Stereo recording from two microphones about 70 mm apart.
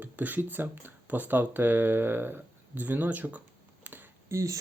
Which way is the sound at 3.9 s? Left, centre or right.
Right.